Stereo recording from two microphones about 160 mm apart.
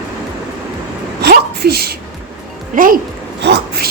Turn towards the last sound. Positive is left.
turn(degrees=-90)